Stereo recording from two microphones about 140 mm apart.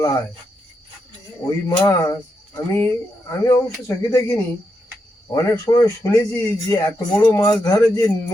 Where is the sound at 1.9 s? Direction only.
25° left (ahead or behind).